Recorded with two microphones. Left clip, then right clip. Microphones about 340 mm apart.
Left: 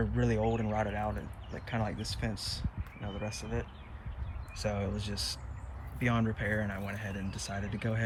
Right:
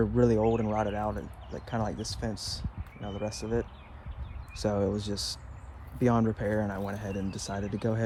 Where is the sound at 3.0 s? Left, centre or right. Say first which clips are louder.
Right 5 dB; right.